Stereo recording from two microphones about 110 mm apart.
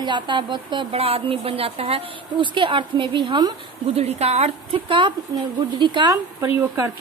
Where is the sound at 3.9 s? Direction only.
70° right (ahead or behind).